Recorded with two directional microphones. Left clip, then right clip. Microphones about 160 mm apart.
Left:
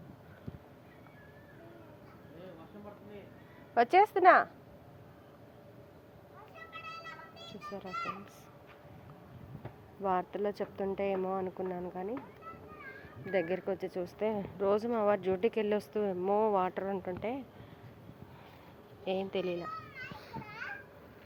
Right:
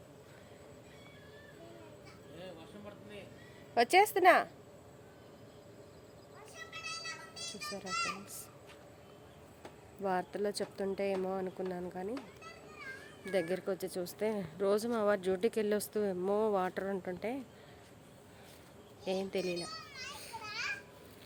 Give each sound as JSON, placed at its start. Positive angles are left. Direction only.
{"t": 3.8, "sound": "speech", "side_deg": -10}
{"t": 7.0, "sound": "children playing", "side_deg": -15}
{"t": 10.0, "sound": "speech", "side_deg": -10}
{"t": 13.3, "sound": "speech", "side_deg": -15}
{"t": 19.0, "sound": "speech", "side_deg": -15}